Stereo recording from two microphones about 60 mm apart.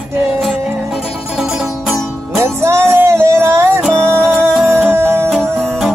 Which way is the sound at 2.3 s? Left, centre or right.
Right.